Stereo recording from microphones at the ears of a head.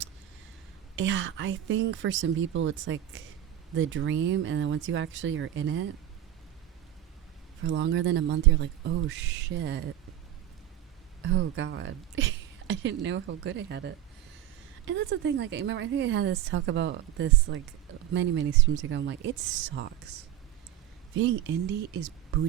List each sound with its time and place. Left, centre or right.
0.9 s a woman's voice: right
7.6 s a woman's voice: right
11.2 s a woman's voice: right